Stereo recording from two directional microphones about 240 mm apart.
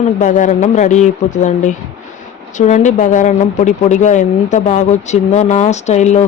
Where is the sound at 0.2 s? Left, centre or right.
Left.